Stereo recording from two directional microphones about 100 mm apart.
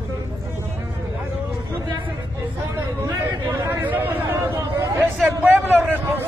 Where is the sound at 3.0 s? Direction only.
25° right (ahead or behind).